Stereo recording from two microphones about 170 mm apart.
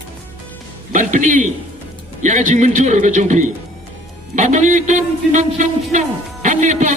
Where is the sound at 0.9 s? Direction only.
50° right (ahead or behind).